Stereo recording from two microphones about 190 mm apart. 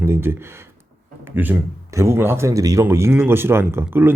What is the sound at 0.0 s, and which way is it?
A man's voice, 10° right (ahead or behind).